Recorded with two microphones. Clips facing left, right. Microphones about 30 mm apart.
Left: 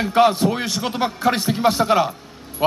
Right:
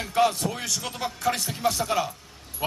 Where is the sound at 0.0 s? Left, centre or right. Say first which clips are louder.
Left 7 dB; left.